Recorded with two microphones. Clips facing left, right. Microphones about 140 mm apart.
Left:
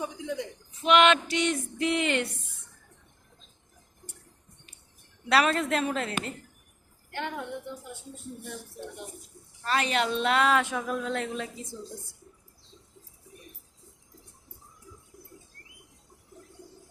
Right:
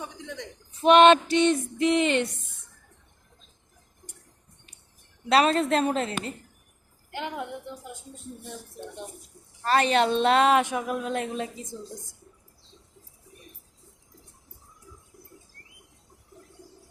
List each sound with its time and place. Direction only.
0.0 s a sound: 10° left (ahead or behind)
0.8 s a woman's voice: 40° right (ahead or behind); by 2.3 s 20° right (ahead or behind)
5.3 s a woman's voice: 25° right (ahead or behind)
9.8 s a woman's voice: 35° right (ahead or behind); by 11.4 s 15° right (ahead or behind)